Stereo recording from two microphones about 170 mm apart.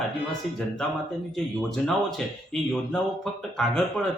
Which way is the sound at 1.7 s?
Centre (ahead or behind).